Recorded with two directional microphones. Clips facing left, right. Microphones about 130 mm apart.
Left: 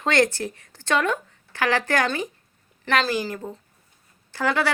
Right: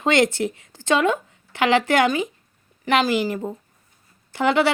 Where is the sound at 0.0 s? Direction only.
20° right (ahead or behind).